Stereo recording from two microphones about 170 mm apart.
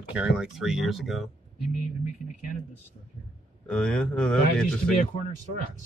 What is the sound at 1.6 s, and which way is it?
Speech, 50° left (ahead or behind).